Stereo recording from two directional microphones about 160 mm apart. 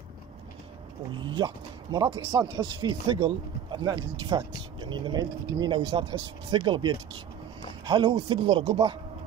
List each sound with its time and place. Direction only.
1.1 s speech: 30° right (ahead or behind)